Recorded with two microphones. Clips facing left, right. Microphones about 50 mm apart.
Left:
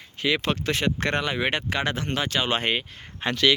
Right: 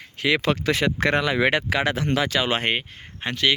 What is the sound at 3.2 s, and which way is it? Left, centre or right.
Speech, right.